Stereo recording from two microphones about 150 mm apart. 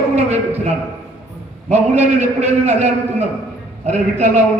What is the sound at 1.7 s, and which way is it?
A man's voice, 45° right (ahead or behind).